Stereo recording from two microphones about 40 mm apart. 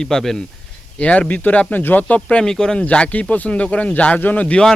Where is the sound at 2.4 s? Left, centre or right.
Centre.